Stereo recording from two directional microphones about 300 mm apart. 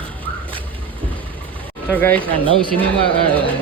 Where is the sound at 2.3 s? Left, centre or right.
Centre.